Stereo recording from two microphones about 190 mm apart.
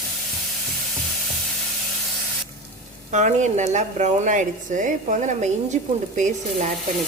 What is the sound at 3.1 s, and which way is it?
Speech, 40° right (ahead or behind).